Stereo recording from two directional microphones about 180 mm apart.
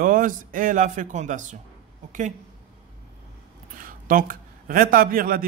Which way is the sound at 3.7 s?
50° right (ahead or behind).